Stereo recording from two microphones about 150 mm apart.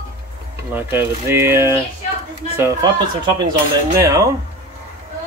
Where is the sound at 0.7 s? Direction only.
15° right (ahead or behind).